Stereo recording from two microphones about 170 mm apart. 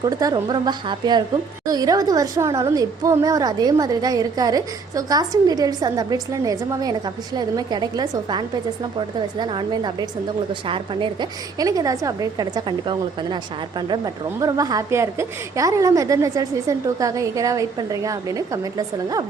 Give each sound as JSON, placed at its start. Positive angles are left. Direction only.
{"t": 0.0, "sound": "a woman's voice", "side_deg": -20}